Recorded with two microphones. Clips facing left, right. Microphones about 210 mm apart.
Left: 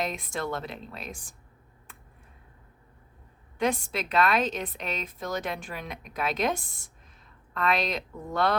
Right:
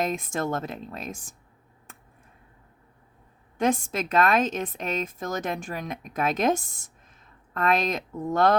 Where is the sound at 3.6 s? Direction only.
45° right (ahead or behind).